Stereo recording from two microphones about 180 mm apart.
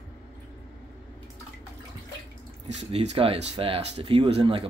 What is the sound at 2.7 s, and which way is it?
Speech, 35° right (ahead or behind).